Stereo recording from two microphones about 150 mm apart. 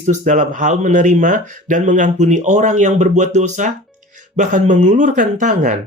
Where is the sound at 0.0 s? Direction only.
55° right (ahead or behind).